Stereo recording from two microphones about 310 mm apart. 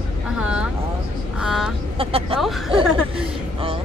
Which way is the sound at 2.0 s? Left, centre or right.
Centre.